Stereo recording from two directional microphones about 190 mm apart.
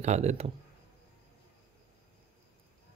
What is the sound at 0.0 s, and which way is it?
Speech, 35° right (ahead or behind).